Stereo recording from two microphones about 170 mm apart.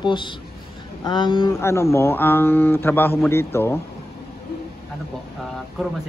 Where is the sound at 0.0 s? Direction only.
25° left (ahead or behind).